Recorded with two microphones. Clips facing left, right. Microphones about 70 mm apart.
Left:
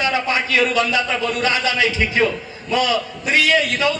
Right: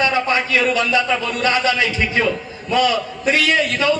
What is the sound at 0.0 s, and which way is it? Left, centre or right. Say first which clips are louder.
A man's voice: right 2 dB; right.